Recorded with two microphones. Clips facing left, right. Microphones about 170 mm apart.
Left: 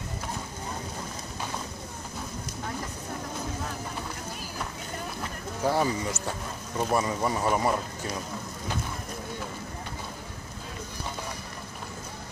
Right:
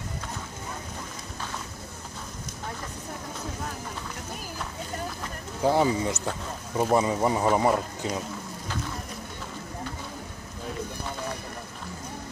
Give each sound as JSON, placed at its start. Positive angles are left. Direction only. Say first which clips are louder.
{"t": 5.6, "sound": "speech", "louder": "right 3 dB", "side_deg": -15}